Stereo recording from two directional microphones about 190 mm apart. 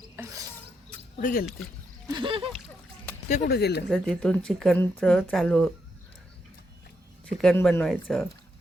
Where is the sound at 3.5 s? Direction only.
60° left (ahead or behind).